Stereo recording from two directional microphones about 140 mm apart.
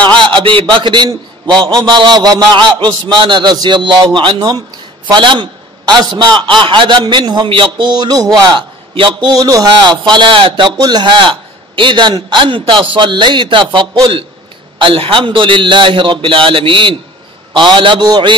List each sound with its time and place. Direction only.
0.3 s a man's voice: 35° right (ahead or behind)